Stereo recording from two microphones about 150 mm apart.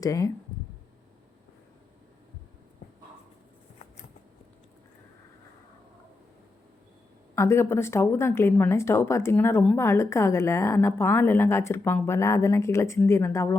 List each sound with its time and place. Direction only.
0.0 s speech: 20° left (ahead or behind)
7.3 s speech: 15° left (ahead or behind)